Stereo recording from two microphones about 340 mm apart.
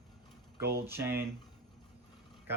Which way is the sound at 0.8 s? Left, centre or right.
Centre.